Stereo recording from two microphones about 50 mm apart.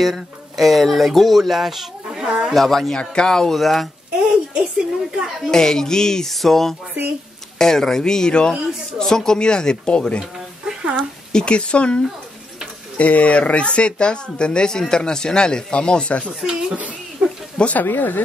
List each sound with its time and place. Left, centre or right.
0.0 s speech: centre
2.5 s a man's voice: centre
4.2 s a sound: centre
5.5 s a man's voice: centre
10.6 s a sound: centre
11.0 s speech: centre
16.3 s speech: centre
16.7 s a sound: right
17.6 s speech: left
17.8 s speech: left